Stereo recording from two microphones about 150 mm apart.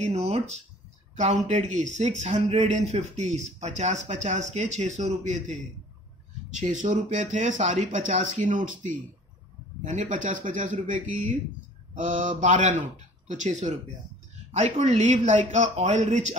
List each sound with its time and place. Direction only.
0.0 s speech: 50° right (ahead or behind)